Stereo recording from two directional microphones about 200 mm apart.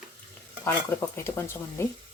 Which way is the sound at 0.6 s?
15° left (ahead or behind).